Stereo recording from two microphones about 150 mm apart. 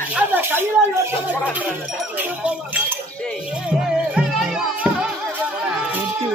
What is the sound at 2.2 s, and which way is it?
Speech, 10° right (ahead or behind).